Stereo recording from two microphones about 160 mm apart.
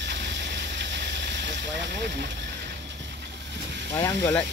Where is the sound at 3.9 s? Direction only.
15° left (ahead or behind).